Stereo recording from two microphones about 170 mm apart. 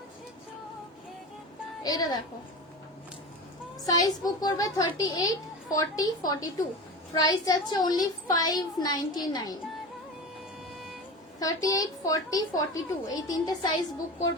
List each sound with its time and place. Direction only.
1.8 s a child's voice: 25° left (ahead or behind)
3.8 s a child's voice: 20° left (ahead or behind)
11.3 s a child's voice: 20° left (ahead or behind)